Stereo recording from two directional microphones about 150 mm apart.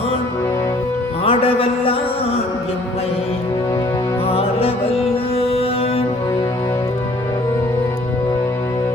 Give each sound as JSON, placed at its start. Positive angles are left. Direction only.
{"t": 1.2, "sound": "music", "side_deg": 40}
{"t": 4.3, "sound": "music", "side_deg": 40}